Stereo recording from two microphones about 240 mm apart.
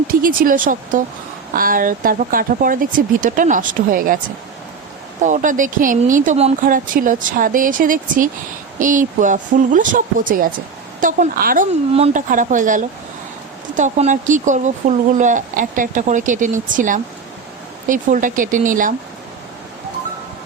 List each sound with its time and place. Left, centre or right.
0.1 s speech: right
5.2 s speech: right